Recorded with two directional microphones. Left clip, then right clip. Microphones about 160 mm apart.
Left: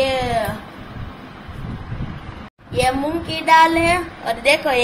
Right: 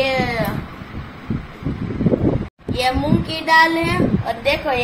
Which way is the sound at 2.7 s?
5° left (ahead or behind).